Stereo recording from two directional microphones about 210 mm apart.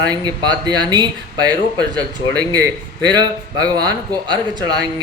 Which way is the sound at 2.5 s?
20° right (ahead or behind).